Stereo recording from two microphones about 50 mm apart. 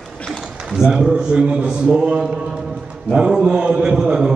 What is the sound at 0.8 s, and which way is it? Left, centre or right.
A man's voice, centre.